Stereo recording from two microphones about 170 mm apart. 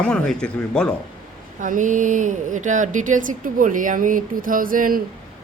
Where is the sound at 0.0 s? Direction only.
5° left (ahead or behind).